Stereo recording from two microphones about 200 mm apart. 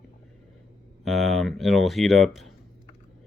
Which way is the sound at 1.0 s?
Centre (ahead or behind).